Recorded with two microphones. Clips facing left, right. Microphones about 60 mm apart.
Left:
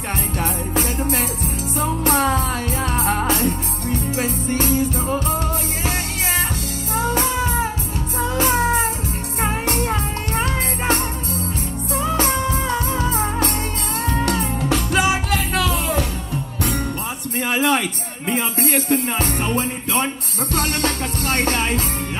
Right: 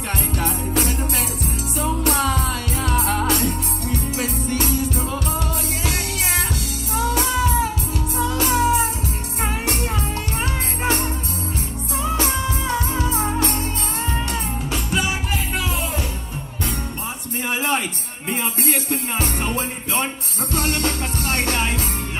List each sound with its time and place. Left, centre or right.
0.4 s music: left
6.9 s music: left
14.0 s music: left
17.4 s a sound: left
18.3 s music: left
20.5 s music: left